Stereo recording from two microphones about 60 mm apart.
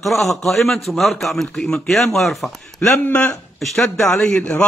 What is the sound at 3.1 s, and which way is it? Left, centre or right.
Speech, left.